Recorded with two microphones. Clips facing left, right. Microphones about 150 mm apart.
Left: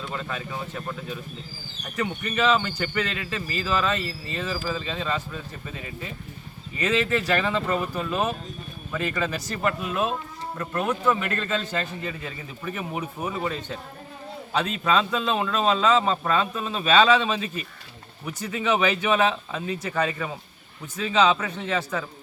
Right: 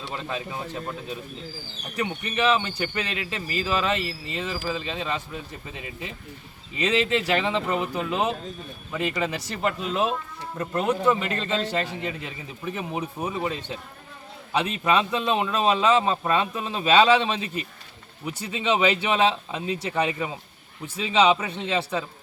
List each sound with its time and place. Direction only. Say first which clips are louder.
0.1 s speech: right 3 dB; 20° right (ahead or behind)
2.0 s speech: left 1 dB; 15° right (ahead or behind)